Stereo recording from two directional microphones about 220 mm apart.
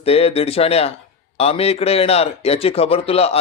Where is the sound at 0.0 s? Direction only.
25° left (ahead or behind).